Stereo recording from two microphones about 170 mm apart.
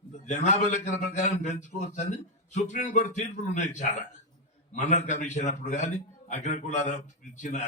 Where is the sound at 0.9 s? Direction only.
45° left (ahead or behind).